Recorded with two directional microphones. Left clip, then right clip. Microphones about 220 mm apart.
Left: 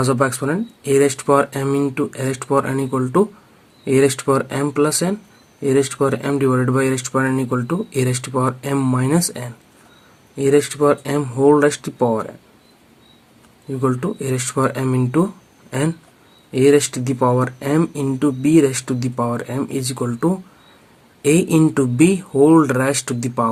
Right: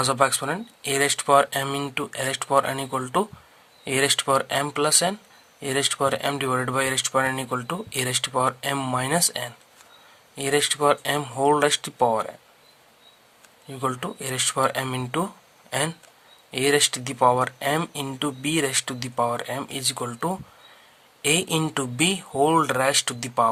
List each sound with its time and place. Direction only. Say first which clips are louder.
0.0 s speech: left 3 dB; 35° right (ahead or behind)
13.7 s speech: left 7 dB; 40° right (ahead or behind)
21.5 s speech: left 9 dB; 35° right (ahead or behind)